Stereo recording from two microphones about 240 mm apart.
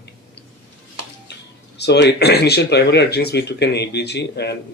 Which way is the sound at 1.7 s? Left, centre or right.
Left.